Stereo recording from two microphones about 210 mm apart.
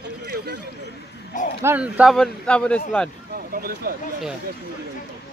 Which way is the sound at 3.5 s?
45° right (ahead or behind).